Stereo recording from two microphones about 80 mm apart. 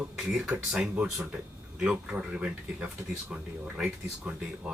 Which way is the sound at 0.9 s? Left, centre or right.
Centre.